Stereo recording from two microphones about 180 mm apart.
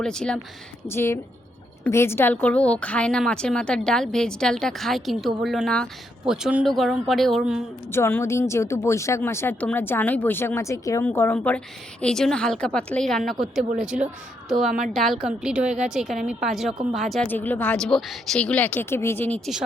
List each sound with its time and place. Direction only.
0.0 s a woman's voice: 5° left (ahead or behind)
7.9 s a woman's voice: 15° left (ahead or behind)